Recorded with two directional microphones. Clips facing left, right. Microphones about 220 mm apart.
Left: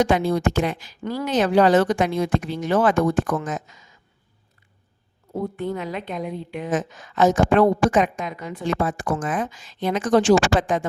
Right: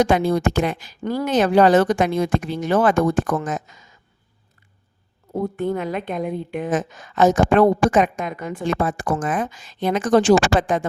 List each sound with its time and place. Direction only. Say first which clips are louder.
0.0 s a woman's voice: right 2 dB; 50° right (ahead or behind)
5.3 s a woman's voice: right 4 dB; 45° right (ahead or behind)